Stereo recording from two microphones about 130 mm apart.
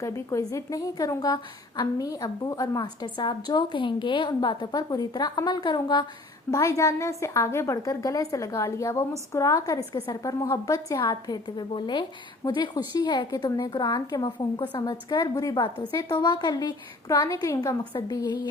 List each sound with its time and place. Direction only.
0.0 s a woman's voice: 25° left (ahead or behind)
6.5 s a woman's voice: 25° left (ahead or behind)